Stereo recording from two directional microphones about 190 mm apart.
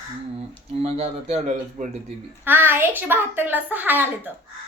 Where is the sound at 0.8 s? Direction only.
30° right (ahead or behind).